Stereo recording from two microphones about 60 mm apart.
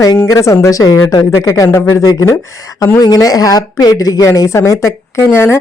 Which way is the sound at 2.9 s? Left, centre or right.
Left.